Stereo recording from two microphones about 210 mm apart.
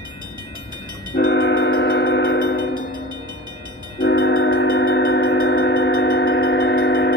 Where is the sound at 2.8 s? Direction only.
60° right (ahead or behind).